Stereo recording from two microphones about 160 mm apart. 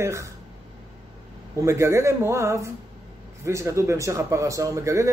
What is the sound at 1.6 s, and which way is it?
Speech, 15° right (ahead or behind).